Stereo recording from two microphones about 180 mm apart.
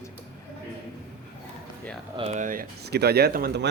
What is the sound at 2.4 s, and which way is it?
A man's voice, 50° right (ahead or behind).